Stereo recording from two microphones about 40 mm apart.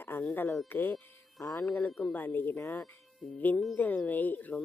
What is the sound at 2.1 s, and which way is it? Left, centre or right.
Speech, left.